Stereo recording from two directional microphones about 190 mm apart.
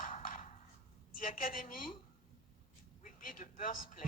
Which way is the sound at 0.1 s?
45° left (ahead or behind).